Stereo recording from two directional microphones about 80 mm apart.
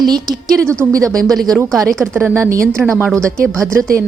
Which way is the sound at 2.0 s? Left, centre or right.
Right.